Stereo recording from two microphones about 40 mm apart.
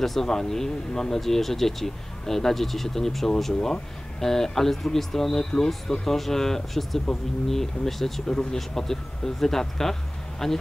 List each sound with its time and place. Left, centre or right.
0.0 s speech: centre